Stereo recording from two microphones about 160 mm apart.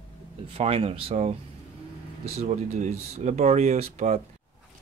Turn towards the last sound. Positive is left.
turn(degrees=-45)  # may be behind; listen again after turning